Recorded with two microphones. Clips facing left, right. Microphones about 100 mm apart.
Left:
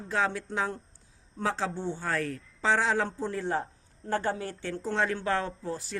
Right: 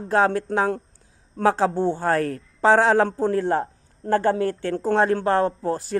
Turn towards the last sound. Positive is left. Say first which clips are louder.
# right 10 dB
turn(degrees=-50)  # may be behind; listen again after turning